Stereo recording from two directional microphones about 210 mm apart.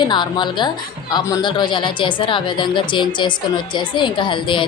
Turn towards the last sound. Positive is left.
turn(degrees=25)  # may be behind; listen again after turning